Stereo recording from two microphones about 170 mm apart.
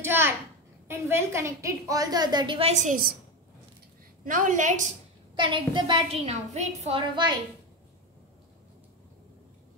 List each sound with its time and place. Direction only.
0.0 s a sound: 15° right (ahead or behind)
0.8 s a woman's voice: 15° right (ahead or behind); by 3.2 s 55° right (ahead or behind)
4.2 s a woman's voice: 50° right (ahead or behind)
5.3 s a woman's voice: 30° right (ahead or behind)